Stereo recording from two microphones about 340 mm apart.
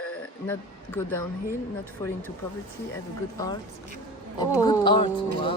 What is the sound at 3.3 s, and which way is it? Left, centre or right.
Speech, centre.